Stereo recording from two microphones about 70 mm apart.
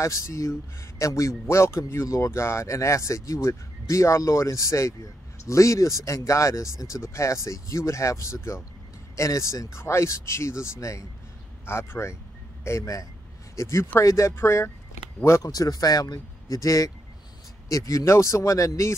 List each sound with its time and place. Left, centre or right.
0.0 s a man's voice: left
11.6 s a man's voice: left
15.4 s a man's voice: left